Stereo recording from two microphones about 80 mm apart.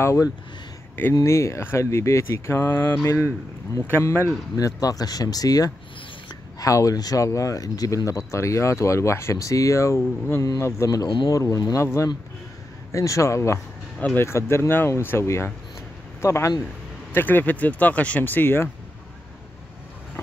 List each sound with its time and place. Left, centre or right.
0.0 s speech: left
4.6 s speech: left
17.1 s speech: left